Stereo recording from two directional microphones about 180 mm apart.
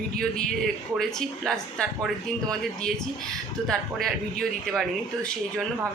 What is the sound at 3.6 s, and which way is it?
Speech, centre (ahead or behind).